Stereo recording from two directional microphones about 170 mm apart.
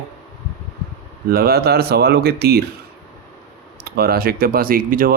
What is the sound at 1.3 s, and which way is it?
Speech, 65° right (ahead or behind).